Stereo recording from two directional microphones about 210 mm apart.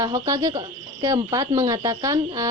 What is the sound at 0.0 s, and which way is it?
A woman's voice, 15° right (ahead or behind).